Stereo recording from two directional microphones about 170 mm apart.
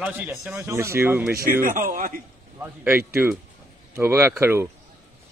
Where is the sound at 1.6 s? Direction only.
55° right (ahead or behind).